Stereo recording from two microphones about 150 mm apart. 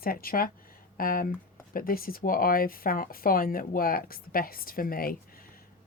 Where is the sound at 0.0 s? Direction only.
75° left (ahead or behind).